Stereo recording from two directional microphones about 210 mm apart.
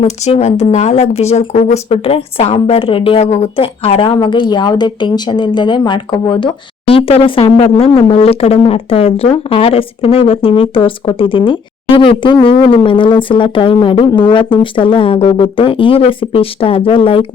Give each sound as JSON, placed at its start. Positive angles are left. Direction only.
{"t": 0.0, "sound": "speech", "side_deg": 30}